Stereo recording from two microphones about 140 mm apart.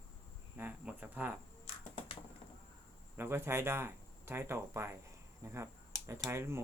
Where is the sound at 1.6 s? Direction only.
40° left (ahead or behind).